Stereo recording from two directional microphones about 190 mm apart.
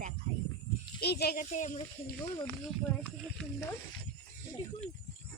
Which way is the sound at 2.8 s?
5° left (ahead or behind).